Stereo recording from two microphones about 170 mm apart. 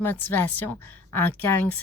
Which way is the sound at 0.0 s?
10° left (ahead or behind).